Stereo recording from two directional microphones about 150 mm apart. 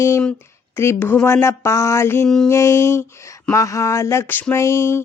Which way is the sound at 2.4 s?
20° left (ahead or behind).